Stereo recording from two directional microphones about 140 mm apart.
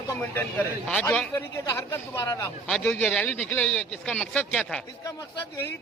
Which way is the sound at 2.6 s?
5° left (ahead or behind).